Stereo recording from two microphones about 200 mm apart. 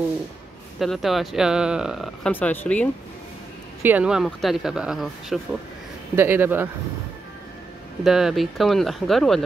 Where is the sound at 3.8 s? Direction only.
5° right (ahead or behind).